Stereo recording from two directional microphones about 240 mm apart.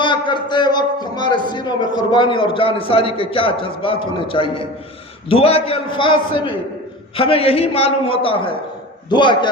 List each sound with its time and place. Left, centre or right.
0.0 s a man's voice: centre